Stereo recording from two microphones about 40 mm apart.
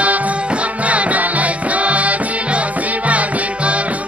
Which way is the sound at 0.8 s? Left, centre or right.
Right.